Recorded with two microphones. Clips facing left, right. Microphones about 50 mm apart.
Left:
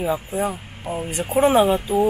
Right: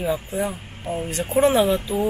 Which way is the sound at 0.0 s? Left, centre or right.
Centre.